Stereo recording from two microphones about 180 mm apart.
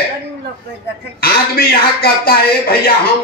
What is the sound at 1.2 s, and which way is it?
A man's voice, 55° left (ahead or behind).